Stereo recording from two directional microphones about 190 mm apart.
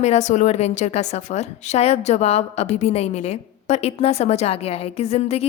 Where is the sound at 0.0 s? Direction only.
35° left (ahead or behind).